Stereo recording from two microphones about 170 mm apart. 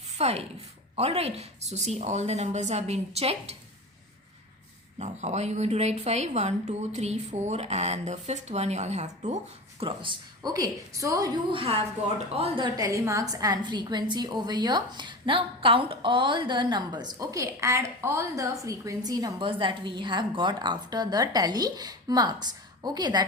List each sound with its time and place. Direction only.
0.2 s speech: 40° right (ahead or behind)
4.9 s speech: 40° right (ahead or behind)
9.8 s a woman's voice: 30° right (ahead or behind)
11.5 s speech: 35° right (ahead or behind)
12.7 s a woman's voice: 20° right (ahead or behind)